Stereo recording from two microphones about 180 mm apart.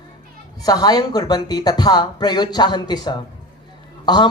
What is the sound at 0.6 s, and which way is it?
A man's voice, 20° left (ahead or behind).